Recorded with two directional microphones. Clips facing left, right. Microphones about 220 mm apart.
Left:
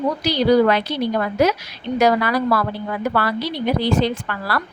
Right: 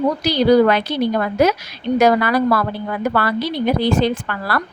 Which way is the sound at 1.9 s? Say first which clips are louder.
Right 2 dB; 50° right (ahead or behind).